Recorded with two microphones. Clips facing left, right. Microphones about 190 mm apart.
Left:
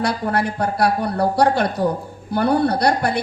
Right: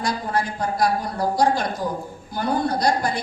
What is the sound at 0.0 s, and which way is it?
A woman's voice, 65° left (ahead or behind).